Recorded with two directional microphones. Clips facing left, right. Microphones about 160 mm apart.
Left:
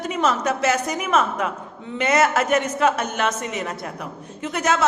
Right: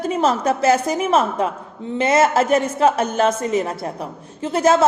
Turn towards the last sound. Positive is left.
turn(degrees=-30)  # may be behind; listen again after turning